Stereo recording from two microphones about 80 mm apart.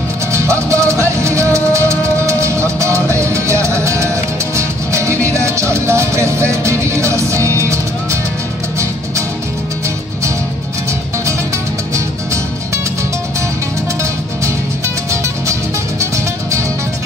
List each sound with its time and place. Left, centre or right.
0.3 s music: right